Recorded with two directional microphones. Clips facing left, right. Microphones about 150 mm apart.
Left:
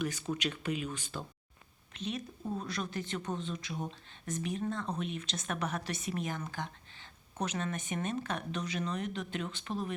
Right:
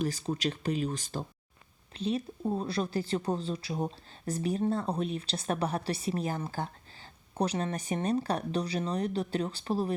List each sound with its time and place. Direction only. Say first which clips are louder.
0.0 s speech: right 4 dB; 35° right (ahead or behind)